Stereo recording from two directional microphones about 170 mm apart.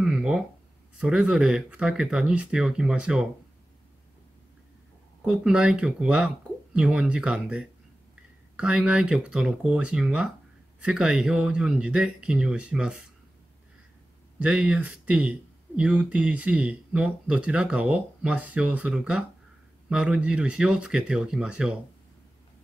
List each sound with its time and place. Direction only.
0.0 s a sound: 5° right (ahead or behind)
0.9 s speech: 5° right (ahead or behind)
5.2 s speech: 5° right (ahead or behind)
14.4 s speech: 5° right (ahead or behind)